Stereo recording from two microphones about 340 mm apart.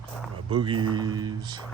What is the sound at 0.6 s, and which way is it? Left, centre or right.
Speech, centre.